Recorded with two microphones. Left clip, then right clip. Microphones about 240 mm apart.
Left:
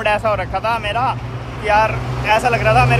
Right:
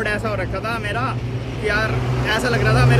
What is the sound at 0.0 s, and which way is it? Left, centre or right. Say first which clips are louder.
Speech: left 6 dB; left.